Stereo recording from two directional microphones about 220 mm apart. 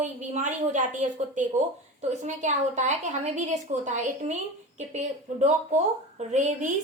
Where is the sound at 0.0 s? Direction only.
35° right (ahead or behind).